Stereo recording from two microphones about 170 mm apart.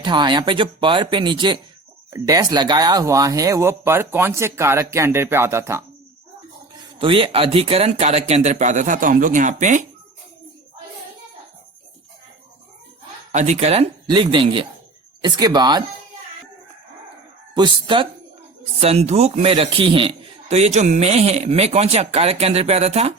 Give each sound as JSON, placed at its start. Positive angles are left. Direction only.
{"t": 0.0, "sound": "speech", "side_deg": -25}
{"t": 7.0, "sound": "speech", "side_deg": -30}
{"t": 13.3, "sound": "a man's voice", "side_deg": -40}
{"t": 17.5, "sound": "a man's voice", "side_deg": -25}